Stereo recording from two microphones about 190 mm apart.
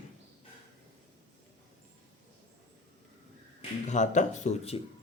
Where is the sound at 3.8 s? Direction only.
40° left (ahead or behind).